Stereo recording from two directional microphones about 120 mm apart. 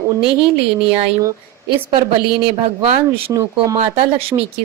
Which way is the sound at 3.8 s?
55° right (ahead or behind).